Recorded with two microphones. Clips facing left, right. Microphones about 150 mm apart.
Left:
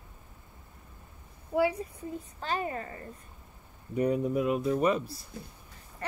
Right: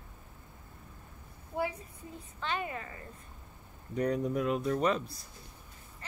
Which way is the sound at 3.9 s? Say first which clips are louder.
Left 3 dB; 5° left (ahead or behind).